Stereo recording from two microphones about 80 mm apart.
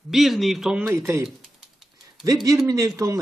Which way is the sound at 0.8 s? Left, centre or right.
Right.